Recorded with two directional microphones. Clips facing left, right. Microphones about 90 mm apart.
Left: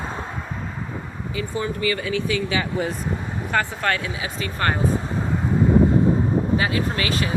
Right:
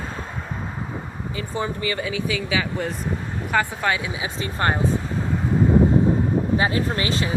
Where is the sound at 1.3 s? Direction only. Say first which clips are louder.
Left 1 dB; 30° right (ahead or behind).